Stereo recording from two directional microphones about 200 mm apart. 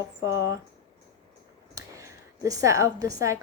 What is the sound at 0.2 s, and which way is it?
Speech, 60° left (ahead or behind).